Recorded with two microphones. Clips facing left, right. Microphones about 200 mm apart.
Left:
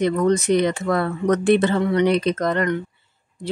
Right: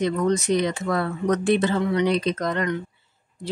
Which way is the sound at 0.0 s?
60° left (ahead or behind).